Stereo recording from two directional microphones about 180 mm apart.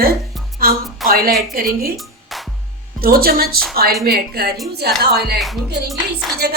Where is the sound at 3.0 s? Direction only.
55° right (ahead or behind).